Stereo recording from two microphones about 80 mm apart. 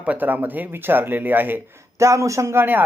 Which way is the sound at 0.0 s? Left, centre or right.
Right.